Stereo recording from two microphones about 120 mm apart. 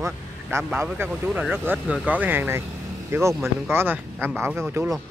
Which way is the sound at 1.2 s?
10° right (ahead or behind).